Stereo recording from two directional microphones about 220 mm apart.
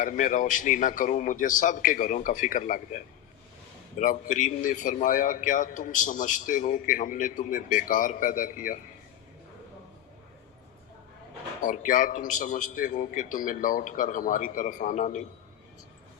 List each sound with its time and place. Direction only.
0.0 s a man's voice: 35° left (ahead or behind)
11.6 s a man's voice: 35° left (ahead or behind)